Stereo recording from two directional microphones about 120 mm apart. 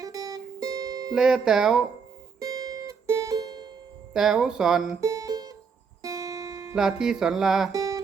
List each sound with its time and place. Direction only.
0.0 s music: 30° right (ahead or behind)
1.1 s speech: 5° right (ahead or behind)
2.4 s music: 30° right (ahead or behind)
4.1 s speech: 5° right (ahead or behind)
4.9 s music: 30° right (ahead or behind)
6.7 s speech: 5° right (ahead or behind)
7.7 s music: 30° right (ahead or behind)